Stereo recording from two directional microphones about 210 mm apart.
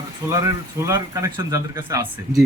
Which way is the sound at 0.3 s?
15° right (ahead or behind).